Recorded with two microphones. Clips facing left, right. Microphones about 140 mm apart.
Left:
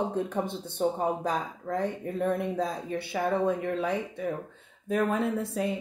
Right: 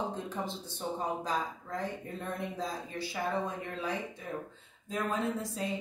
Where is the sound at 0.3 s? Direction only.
55° left (ahead or behind).